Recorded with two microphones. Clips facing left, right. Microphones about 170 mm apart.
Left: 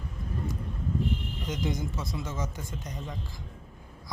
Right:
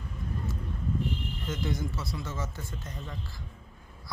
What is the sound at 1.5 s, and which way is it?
Speech, 20° left (ahead or behind).